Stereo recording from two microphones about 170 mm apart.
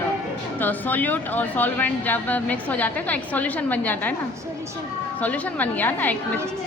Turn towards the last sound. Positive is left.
turn(degrees=10)  # may be behind; listen again after turning